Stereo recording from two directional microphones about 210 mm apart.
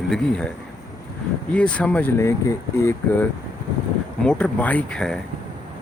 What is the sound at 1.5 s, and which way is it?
Speech, 5° left (ahead or behind).